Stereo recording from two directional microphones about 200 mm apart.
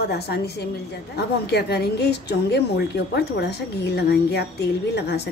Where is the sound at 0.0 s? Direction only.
55° left (ahead or behind).